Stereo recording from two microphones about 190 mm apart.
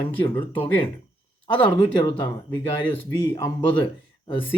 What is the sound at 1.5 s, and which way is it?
Speech, 25° left (ahead or behind).